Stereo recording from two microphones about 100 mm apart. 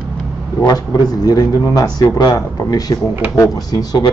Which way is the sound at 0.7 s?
40° left (ahead or behind).